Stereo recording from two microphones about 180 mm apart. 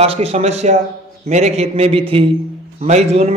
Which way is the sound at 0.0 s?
35° right (ahead or behind).